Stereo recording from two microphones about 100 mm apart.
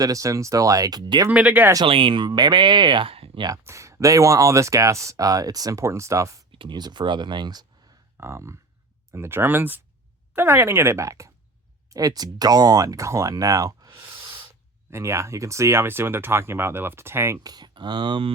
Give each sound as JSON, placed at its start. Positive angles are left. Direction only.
{"t": 0.0, "sound": "speech", "side_deg": -35}
{"t": 1.3, "sound": "speech", "side_deg": -15}
{"t": 1.8, "sound": "speech", "side_deg": -60}
{"t": 3.1, "sound": "a sound", "side_deg": -70}
{"t": 3.6, "sound": "speech", "side_deg": -30}
{"t": 6.5, "sound": "speech", "side_deg": -55}
{"t": 8.2, "sound": "speech", "side_deg": -25}
{"t": 17.4, "sound": "speech", "side_deg": -45}